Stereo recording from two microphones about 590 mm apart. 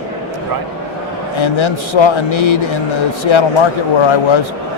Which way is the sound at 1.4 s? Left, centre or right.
Left.